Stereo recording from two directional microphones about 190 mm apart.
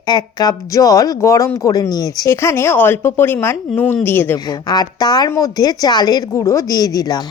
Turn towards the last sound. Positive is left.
turn(degrees=20)  # may be behind; listen again after turning